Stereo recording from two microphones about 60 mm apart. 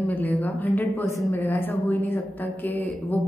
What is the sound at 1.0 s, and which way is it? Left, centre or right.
Speech, left.